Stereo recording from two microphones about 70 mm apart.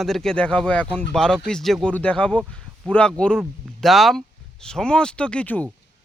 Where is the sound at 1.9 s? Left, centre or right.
Centre.